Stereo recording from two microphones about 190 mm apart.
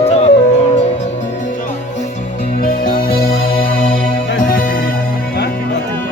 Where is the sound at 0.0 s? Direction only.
35° left (ahead or behind).